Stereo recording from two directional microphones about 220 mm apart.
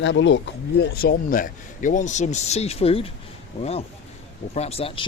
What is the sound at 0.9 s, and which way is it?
A man's voice, 45° left (ahead or behind).